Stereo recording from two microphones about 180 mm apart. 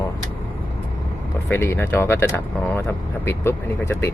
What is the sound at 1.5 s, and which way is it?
Speech, 15° left (ahead or behind).